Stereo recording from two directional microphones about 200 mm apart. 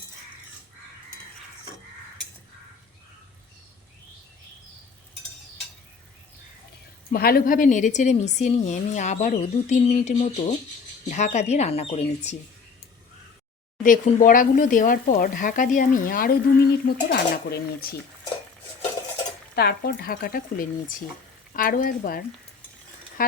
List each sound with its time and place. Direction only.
7.1 s a woman's voice: 50° left (ahead or behind)
13.8 s speech: 40° left (ahead or behind)
19.5 s speech: 50° left (ahead or behind)